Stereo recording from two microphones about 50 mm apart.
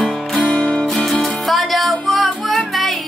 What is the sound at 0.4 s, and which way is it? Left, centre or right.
Music, left.